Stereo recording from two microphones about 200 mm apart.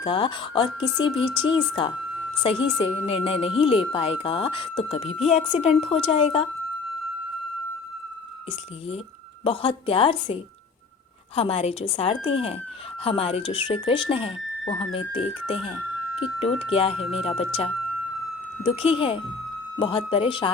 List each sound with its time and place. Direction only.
0.0 s speech: 25° left (ahead or behind)
9.4 s speech: 30° left (ahead or behind)
11.3 s speech: 30° left (ahead or behind)
18.6 s speech: 30° left (ahead or behind)